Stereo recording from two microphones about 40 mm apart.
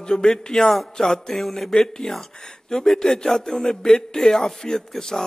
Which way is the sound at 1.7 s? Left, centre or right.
Centre.